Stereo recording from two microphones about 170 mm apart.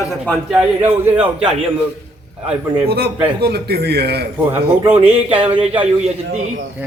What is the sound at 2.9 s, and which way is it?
A man's voice, 65° right (ahead or behind).